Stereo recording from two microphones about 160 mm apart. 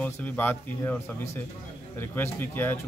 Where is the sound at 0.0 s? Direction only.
10° left (ahead or behind).